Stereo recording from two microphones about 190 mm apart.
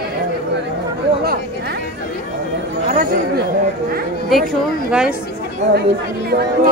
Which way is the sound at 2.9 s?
45° right (ahead or behind).